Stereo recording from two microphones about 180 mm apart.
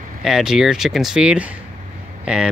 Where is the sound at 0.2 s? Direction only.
Centre (ahead or behind).